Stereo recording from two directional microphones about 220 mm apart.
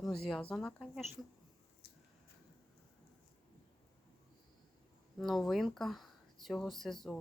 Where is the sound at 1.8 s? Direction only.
45° left (ahead or behind).